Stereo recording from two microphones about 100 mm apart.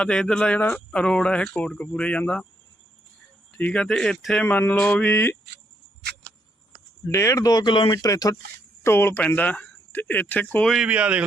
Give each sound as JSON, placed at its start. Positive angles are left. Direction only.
{"t": 0.0, "sound": "speech", "side_deg": 5}
{"t": 3.5, "sound": "speech", "side_deg": 15}
{"t": 4.4, "sound": "speech", "side_deg": 15}
{"t": 7.1, "sound": "speech", "side_deg": 30}
{"t": 7.9, "sound": "speech", "side_deg": 35}
{"t": 8.8, "sound": "speech", "side_deg": 25}
{"t": 10.8, "sound": "speech", "side_deg": -10}